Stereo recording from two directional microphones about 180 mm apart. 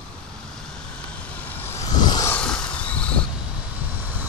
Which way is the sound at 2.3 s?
5° left (ahead or behind).